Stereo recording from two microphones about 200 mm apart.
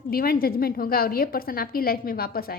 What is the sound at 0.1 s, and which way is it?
A woman's voice, 45° left (ahead or behind).